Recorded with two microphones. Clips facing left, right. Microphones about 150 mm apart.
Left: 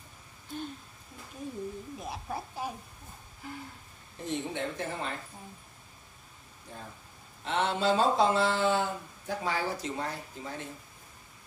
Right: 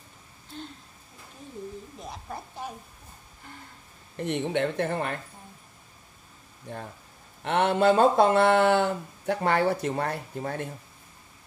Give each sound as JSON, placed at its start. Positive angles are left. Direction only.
{"t": 2.0, "sound": "a woman's voice", "side_deg": 5}
{"t": 3.4, "sound": "a sound", "side_deg": 5}
{"t": 4.2, "sound": "speech", "side_deg": -65}
{"t": 6.7, "sound": "speech", "side_deg": -65}